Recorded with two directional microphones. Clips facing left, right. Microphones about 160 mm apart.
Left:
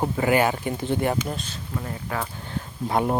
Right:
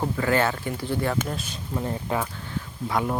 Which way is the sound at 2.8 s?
30° left (ahead or behind).